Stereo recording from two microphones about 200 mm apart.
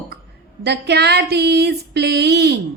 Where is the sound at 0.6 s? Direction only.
55° right (ahead or behind).